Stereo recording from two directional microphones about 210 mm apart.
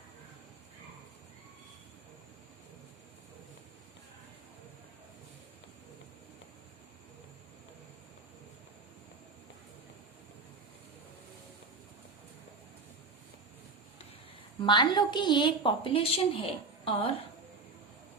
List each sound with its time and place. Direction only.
14.6 s a woman's voice: 20° left (ahead or behind)